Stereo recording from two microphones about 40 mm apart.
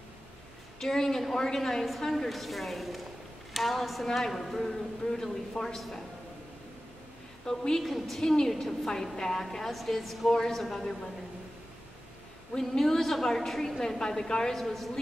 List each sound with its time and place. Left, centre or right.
0.7 s a woman's voice: centre
7.4 s a woman's voice: centre
8.2 s a woman's voice: centre
12.5 s a woman's voice: centre
14.6 s a woman's voice: centre